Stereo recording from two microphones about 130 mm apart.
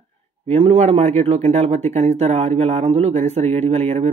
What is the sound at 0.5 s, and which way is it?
Speech, 50° right (ahead or behind).